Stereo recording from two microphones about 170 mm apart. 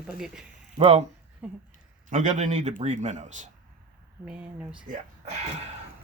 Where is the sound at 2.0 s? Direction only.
50° right (ahead or behind).